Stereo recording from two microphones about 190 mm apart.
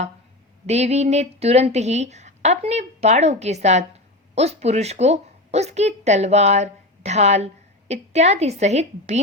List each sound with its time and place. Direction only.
0.7 s a woman's voice: 35° right (ahead or behind)